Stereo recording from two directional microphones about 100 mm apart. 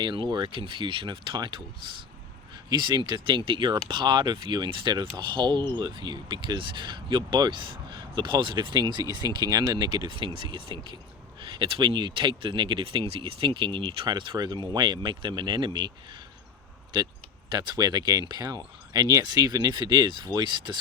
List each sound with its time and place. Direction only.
0.0 s speech: 50° right (ahead or behind)
0.6 s speech: 60° right (ahead or behind)
16.9 s speech: 50° right (ahead or behind)